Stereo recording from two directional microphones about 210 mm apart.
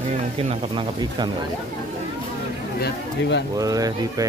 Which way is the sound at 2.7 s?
50° left (ahead or behind).